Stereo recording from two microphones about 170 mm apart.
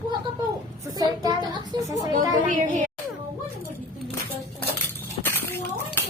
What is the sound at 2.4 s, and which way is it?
Speech, 50° right (ahead or behind).